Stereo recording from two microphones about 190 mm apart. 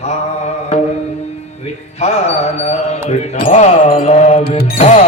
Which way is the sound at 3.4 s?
45° left (ahead or behind).